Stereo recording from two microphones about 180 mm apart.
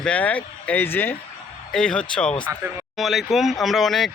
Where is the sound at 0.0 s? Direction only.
5° left (ahead or behind).